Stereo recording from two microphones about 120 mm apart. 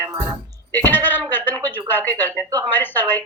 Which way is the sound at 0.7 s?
15° left (ahead or behind).